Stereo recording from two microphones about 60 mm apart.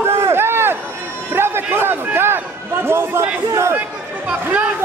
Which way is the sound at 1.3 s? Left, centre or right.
Right.